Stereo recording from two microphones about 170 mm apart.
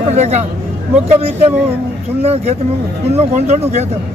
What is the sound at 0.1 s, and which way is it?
Speech, 40° right (ahead or behind).